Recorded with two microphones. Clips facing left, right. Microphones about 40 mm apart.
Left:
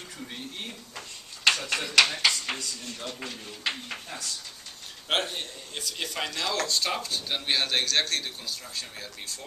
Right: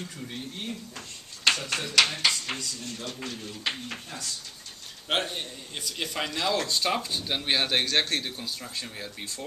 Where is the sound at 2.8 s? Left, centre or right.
Left.